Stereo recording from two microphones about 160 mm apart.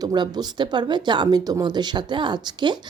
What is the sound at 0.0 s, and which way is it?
A woman's voice, 25° right (ahead or behind).